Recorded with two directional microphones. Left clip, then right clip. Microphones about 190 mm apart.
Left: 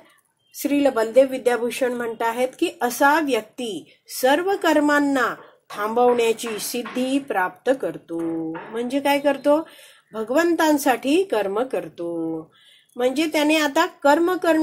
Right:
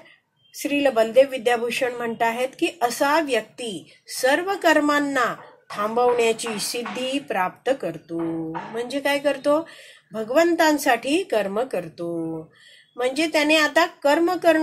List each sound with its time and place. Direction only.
0.6 s a woman's voice: 30° left (ahead or behind)